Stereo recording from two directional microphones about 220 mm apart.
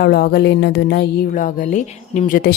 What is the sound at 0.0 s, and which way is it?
Speech, 45° left (ahead or behind).